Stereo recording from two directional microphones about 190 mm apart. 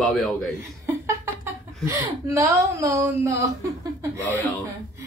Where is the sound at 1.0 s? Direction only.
15° right (ahead or behind).